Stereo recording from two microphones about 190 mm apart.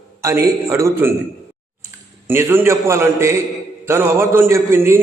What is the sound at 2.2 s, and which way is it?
A man's voice, 10° right (ahead or behind).